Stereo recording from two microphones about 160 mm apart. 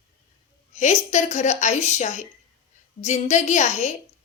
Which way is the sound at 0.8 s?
45° left (ahead or behind).